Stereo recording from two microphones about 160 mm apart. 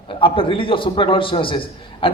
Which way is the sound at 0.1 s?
35° left (ahead or behind).